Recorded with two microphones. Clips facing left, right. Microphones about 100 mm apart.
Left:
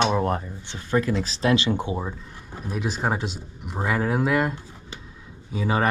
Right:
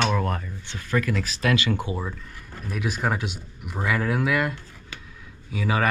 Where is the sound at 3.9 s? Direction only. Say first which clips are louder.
Left 1 dB; 5° left (ahead or behind).